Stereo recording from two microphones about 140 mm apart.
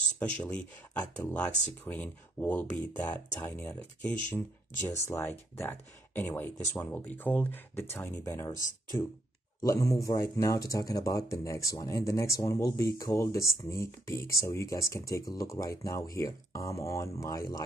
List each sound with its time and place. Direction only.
0.2 s speech: 10° left (ahead or behind)
9.6 s speech: 25° left (ahead or behind)